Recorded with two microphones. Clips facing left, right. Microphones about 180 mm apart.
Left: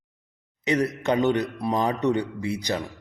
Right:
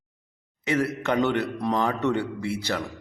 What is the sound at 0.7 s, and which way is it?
A man's voice, 20° left (ahead or behind).